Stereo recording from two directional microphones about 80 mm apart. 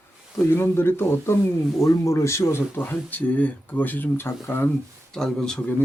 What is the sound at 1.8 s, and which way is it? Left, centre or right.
Speech, left.